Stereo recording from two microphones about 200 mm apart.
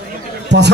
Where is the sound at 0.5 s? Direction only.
60° right (ahead or behind).